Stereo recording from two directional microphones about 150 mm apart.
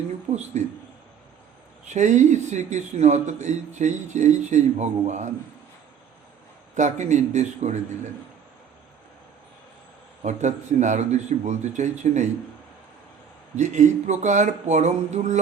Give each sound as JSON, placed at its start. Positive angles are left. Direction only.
{"t": 0.3, "sound": "speech", "side_deg": -55}
{"t": 1.9, "sound": "speech", "side_deg": -55}
{"t": 6.7, "sound": "speech", "side_deg": -50}
{"t": 10.2, "sound": "speech", "side_deg": -55}
{"t": 13.6, "sound": "speech", "side_deg": -50}